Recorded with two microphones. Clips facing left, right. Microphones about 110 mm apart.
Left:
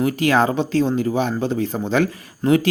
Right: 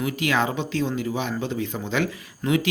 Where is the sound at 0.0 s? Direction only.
40° left (ahead or behind).